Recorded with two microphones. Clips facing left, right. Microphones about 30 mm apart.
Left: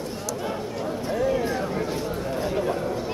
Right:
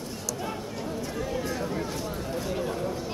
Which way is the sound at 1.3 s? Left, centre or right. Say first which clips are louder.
Left 5 dB; left.